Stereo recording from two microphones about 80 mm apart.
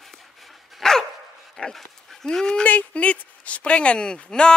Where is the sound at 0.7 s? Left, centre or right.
Centre.